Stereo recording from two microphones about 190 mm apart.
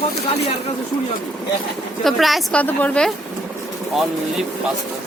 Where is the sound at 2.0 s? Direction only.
Centre (ahead or behind).